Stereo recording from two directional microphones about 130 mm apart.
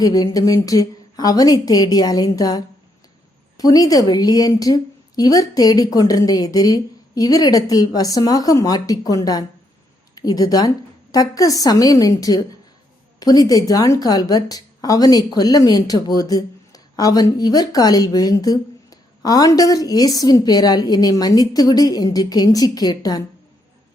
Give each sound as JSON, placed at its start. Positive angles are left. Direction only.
{"t": 0.0, "sound": "a woman's voice", "side_deg": 30}